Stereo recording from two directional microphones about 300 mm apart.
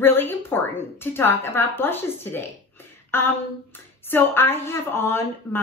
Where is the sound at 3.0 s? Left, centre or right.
Centre.